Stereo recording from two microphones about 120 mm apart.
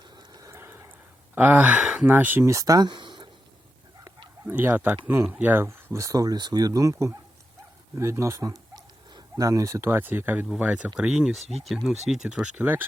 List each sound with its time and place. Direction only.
0.0 s a sound: 40° right (ahead or behind); by 0.9 s 20° right (ahead or behind)
1.4 s speech: 15° right (ahead or behind); by 3.2 s 40° right (ahead or behind)
4.4 s speech: 15° right (ahead or behind)